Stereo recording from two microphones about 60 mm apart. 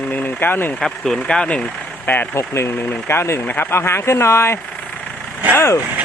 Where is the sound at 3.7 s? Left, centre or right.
Left.